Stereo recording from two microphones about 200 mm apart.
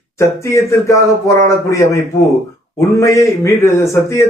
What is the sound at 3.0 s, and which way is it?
A man's voice, 15° left (ahead or behind).